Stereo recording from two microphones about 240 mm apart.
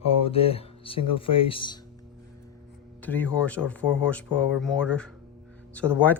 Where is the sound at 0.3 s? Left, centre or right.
Left.